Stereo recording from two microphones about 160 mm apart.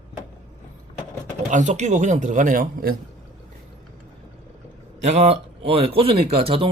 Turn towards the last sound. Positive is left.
turn(degrees=-35)  # may be behind; listen again after turning